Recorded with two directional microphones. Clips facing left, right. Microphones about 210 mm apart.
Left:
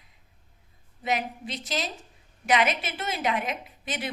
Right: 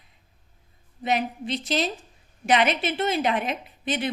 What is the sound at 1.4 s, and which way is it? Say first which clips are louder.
Speech: right 6 dB; 25° right (ahead or behind).